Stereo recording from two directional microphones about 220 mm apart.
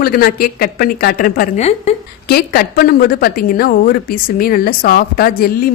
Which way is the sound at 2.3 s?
45° left (ahead or behind).